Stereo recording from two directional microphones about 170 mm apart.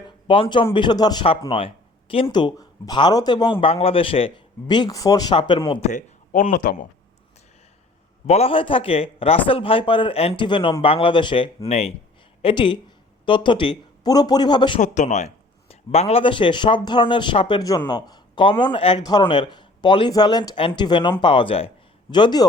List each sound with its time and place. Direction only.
0.3 s speech: 30° left (ahead or behind)
3.6 s speech: 35° left (ahead or behind)
5.9 s speech: 45° left (ahead or behind)
8.3 s speech: 35° left (ahead or behind)
14.8 s speech: 45° left (ahead or behind); by 22.4 s 25° left (ahead or behind)